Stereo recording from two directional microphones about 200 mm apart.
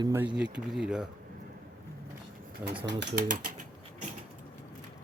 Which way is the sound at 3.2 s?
40° right (ahead or behind).